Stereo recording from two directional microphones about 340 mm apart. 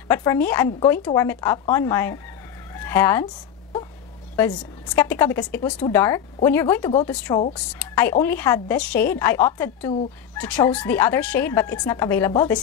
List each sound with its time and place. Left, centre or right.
0.1 s a woman's voice: centre
2.7 s chicken: centre
4.4 s a woman's voice: centre